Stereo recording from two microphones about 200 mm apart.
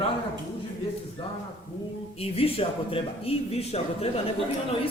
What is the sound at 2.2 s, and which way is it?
Speech, 30° left (ahead or behind).